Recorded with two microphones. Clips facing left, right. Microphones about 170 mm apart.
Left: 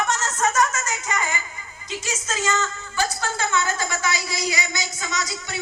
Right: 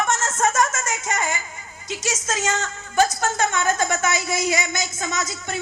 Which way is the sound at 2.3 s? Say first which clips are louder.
Left 1 dB; 45° right (ahead or behind).